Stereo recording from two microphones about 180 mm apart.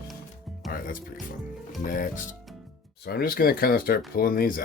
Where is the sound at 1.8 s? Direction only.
50° left (ahead or behind).